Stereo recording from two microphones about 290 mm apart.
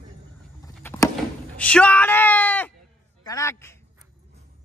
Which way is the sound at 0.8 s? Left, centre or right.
Centre.